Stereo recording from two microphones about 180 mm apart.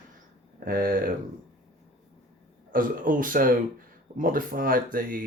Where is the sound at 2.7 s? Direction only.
50° right (ahead or behind).